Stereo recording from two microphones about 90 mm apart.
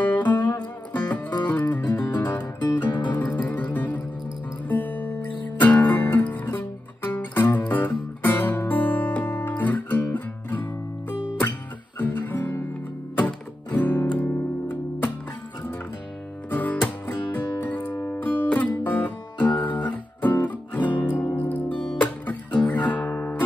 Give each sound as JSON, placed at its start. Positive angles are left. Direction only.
{"t": 0.1, "sound": "music", "side_deg": 20}
{"t": 12.0, "sound": "guitar", "side_deg": 20}
{"t": 13.7, "sound": "music", "side_deg": 20}
{"t": 16.4, "sound": "music", "side_deg": 20}